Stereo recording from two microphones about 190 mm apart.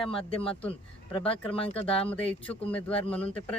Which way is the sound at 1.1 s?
30° left (ahead or behind).